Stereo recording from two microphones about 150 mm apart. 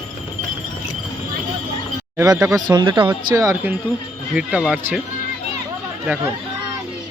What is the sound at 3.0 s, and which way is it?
Speech, 20° right (ahead or behind).